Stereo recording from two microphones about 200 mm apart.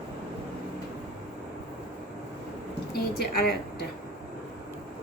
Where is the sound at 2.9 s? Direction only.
50° left (ahead or behind).